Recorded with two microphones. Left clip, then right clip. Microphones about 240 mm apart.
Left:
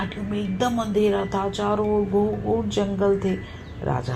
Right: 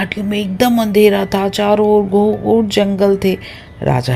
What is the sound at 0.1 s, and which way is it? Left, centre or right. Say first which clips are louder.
Speech: right 10 dB; right.